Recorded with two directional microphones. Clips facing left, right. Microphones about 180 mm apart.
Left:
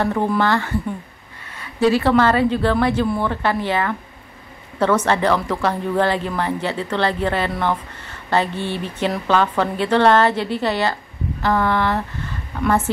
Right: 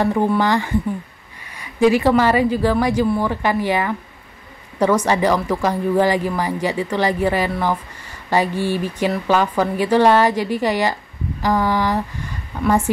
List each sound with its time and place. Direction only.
0.0 s speech: 15° right (ahead or behind)